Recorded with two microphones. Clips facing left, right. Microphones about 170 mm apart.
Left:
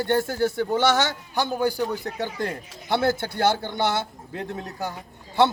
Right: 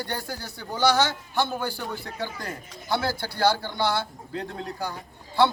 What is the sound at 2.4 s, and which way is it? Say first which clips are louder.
Speech: left 7 dB; 25° left (ahead or behind).